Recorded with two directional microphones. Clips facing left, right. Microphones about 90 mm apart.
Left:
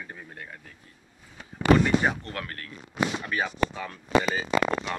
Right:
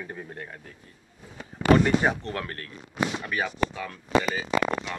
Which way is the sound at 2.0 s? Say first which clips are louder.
Right 2 dB; 20° right (ahead or behind).